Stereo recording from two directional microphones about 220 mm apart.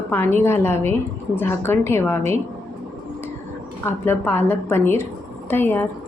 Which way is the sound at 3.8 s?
10° left (ahead or behind).